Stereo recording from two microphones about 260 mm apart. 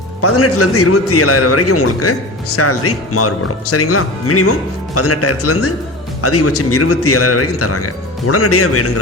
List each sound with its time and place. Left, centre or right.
0.2 s speech: left